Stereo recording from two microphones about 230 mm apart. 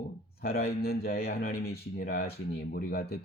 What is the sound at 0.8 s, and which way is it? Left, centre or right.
Speech, left.